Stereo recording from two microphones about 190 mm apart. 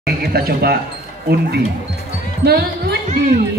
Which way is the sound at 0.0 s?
55° right (ahead or behind).